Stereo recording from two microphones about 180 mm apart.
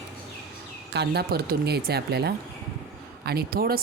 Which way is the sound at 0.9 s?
60° right (ahead or behind).